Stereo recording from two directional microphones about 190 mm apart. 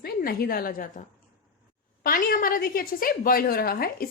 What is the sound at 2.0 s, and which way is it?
Speech, 50° left (ahead or behind).